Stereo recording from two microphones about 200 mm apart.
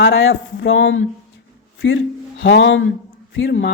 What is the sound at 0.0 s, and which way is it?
A woman's voice, 60° left (ahead or behind).